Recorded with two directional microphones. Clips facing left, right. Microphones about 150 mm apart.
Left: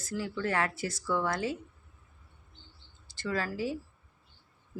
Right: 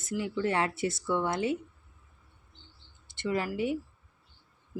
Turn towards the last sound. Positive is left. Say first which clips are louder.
# right 3 dB
turn(degrees=-20)  # may be behind; listen again after turning